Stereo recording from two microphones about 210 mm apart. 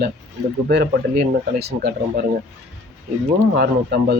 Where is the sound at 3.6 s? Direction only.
50° right (ahead or behind).